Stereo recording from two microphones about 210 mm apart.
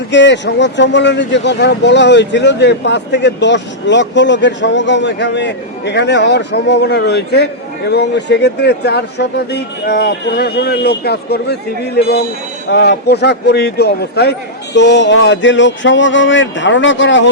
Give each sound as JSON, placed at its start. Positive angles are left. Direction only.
{"t": 0.1, "sound": "speech", "side_deg": 55}
{"t": 12.7, "sound": "speech", "side_deg": 50}